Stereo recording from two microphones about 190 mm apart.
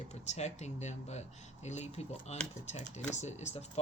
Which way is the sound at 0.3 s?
35° left (ahead or behind).